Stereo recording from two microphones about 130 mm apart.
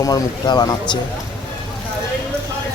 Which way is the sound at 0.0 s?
30° left (ahead or behind).